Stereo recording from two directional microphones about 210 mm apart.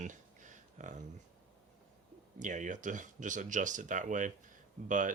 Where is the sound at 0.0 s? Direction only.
35° right (ahead or behind).